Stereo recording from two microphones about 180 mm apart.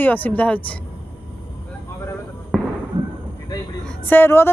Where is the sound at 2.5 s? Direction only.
5° left (ahead or behind).